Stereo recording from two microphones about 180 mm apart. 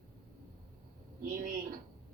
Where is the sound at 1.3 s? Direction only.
50° right (ahead or behind).